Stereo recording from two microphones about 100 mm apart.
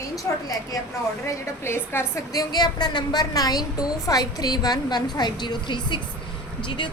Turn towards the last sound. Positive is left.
turn(degrees=55)  # may be behind; listen again after turning